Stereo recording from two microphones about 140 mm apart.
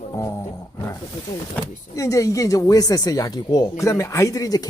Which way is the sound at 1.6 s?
20° left (ahead or behind).